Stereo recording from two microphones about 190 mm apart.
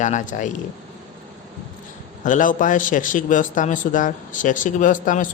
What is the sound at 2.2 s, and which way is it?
Speech, 45° left (ahead or behind).